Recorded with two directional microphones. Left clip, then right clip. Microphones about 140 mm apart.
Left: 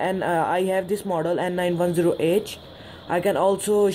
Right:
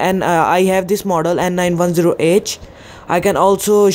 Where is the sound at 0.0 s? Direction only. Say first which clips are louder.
Right 9 dB; 45° right (ahead or behind).